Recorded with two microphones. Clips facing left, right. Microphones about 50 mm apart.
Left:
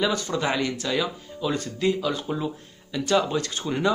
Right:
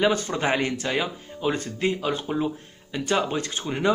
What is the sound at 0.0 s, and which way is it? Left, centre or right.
Speech, right.